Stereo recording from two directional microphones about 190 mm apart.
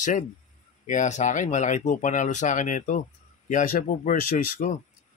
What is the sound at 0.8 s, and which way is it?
Speech, 40° left (ahead or behind).